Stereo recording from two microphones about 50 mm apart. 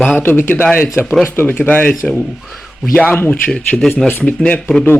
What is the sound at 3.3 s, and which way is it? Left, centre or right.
Speech, left.